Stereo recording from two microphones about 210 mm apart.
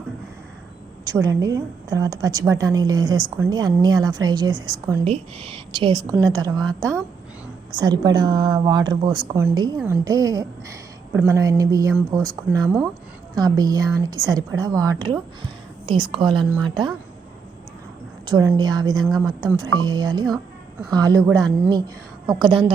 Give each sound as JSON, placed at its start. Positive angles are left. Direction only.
{"t": 1.0, "sound": "a woman's voice", "side_deg": -15}
{"t": 7.8, "sound": "a woman's voice", "side_deg": -20}
{"t": 12.6, "sound": "speech", "side_deg": 0}
{"t": 13.3, "sound": "a woman's voice", "side_deg": -20}
{"t": 18.3, "sound": "a woman's voice", "side_deg": -20}